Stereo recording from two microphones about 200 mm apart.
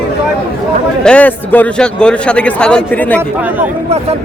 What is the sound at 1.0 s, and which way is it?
A man's voice, 5° left (ahead or behind).